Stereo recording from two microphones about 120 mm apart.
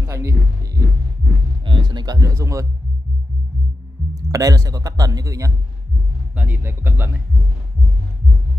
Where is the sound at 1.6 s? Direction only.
40° right (ahead or behind); by 2.7 s 25° right (ahead or behind).